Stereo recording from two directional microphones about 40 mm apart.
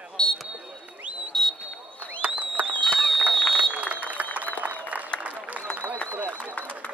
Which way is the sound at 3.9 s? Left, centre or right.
Right.